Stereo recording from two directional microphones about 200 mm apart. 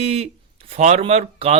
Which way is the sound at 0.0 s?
30° right (ahead or behind).